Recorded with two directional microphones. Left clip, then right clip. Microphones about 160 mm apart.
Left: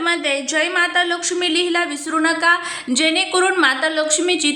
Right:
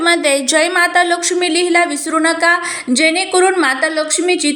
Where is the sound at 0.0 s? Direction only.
35° right (ahead or behind).